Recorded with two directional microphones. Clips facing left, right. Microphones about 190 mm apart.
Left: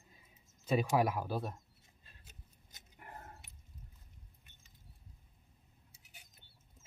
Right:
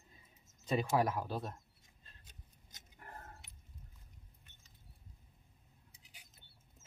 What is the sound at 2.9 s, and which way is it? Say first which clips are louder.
Dog: left 1 dB; 15° left (ahead or behind).